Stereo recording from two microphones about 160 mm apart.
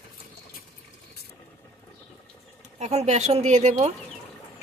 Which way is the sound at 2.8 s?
45° right (ahead or behind).